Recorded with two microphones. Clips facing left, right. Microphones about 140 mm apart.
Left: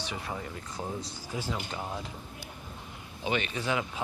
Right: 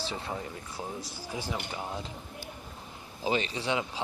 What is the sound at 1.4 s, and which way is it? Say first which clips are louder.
Speech: left 1 dB; 15° right (ahead or behind).